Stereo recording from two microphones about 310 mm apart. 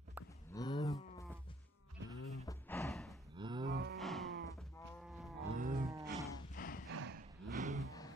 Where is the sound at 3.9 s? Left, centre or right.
Centre.